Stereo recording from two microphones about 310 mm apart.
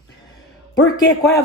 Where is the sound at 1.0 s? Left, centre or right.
Centre.